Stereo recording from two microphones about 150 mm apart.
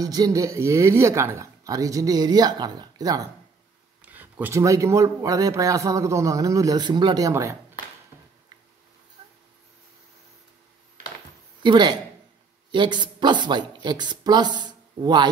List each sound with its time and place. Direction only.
0.0 s a man's voice: 25° right (ahead or behind)
4.0 s a man's voice: 10° right (ahead or behind)
11.6 s a man's voice: 30° right (ahead or behind)